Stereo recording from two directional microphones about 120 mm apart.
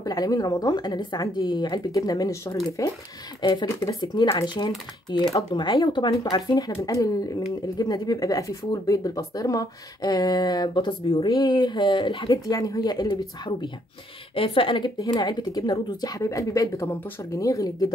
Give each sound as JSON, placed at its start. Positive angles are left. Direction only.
{"t": 0.0, "sound": "speech", "side_deg": 30}
{"t": 12.5, "sound": "speech", "side_deg": 30}